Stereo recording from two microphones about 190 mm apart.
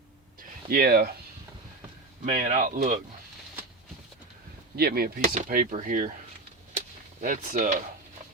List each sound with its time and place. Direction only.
0.7 s speech: 55° right (ahead or behind)
2.2 s speech: 45° right (ahead or behind)
4.8 s speech: 55° right (ahead or behind)
6.7 s a sound: 40° right (ahead or behind)